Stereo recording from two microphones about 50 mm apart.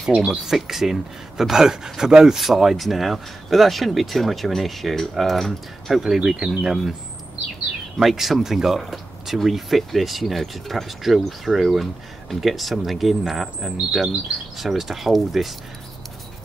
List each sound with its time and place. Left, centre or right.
0.0 s speech: centre
0.5 s speech: centre
8.0 s speech: centre